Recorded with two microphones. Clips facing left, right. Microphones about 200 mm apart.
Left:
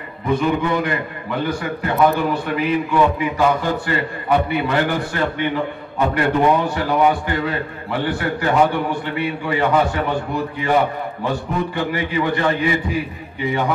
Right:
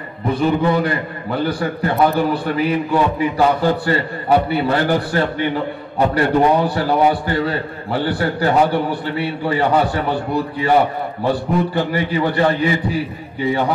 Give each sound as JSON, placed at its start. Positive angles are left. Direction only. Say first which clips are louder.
{"t": 0.3, "sound": "a man's voice", "louder": "right 2 dB", "side_deg": -35}
{"t": 11.2, "sound": "a man's voice", "louder": "right 5 dB", "side_deg": -35}